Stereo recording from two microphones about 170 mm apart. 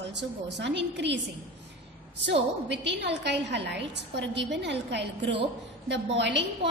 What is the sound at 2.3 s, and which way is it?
A woman's voice, 90° right.